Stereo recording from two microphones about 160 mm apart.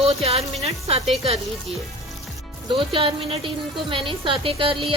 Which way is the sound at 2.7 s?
35° right (ahead or behind).